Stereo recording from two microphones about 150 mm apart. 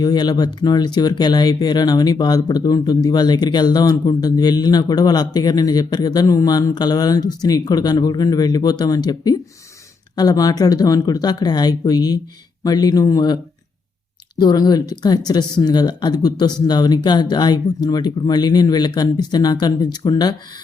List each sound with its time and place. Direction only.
0.0 s speech: 25° left (ahead or behind)